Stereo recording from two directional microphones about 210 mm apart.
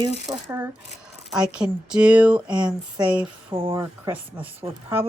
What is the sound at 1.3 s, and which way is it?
Speech, 5° right (ahead or behind).